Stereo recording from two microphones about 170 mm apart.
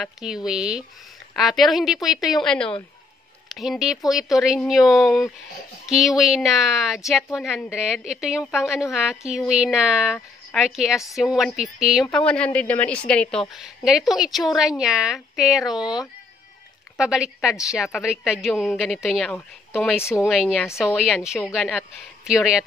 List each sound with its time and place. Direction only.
0.0 s a woman's voice: 5° right (ahead or behind)
17.0 s a woman's voice: 5° right (ahead or behind)
20.0 s speech: 15° left (ahead or behind)
20.2 s a woman's voice: 5° right (ahead or behind)
20.5 s speech: 15° left (ahead or behind)
20.8 s a woman's voice: 5° right (ahead or behind)